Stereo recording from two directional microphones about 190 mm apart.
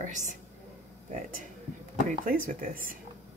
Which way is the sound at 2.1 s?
45° right (ahead or behind).